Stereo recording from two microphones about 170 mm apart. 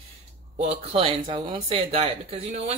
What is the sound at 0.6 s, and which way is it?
Speech, 35° right (ahead or behind).